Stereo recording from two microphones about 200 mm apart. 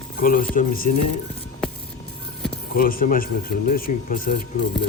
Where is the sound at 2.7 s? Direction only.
45° left (ahead or behind).